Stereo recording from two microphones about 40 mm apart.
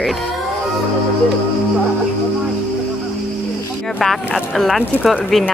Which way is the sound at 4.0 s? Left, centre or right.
Centre.